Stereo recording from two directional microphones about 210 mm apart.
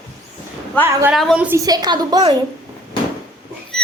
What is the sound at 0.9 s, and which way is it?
Speech, 15° right (ahead or behind).